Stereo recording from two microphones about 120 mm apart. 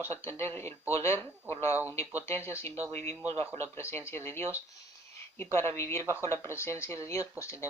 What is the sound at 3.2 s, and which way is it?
Speech, 55° right (ahead or behind).